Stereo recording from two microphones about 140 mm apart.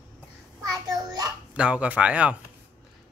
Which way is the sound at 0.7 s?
25° right (ahead or behind).